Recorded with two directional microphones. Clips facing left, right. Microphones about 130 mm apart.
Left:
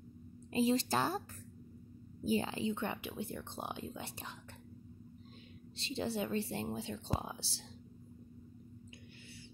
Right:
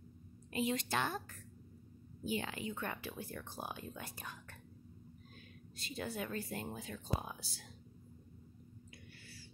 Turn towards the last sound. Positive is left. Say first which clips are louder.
# left 3 dB
turn(degrees=25)  # may be behind; listen again after turning